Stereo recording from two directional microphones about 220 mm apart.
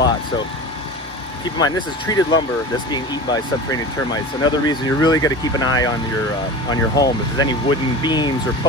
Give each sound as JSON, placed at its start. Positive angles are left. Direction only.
{"t": 1.6, "sound": "speech", "side_deg": 15}